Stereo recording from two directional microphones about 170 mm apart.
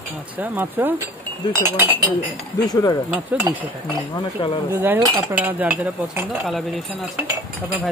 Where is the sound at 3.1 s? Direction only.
10° right (ahead or behind).